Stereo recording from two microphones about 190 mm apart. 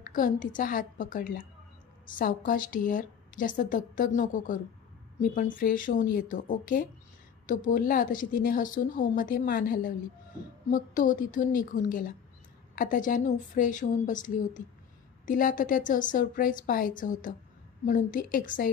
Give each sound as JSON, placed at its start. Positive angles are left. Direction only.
{"t": 0.0, "sound": "a woman's voice", "side_deg": 45}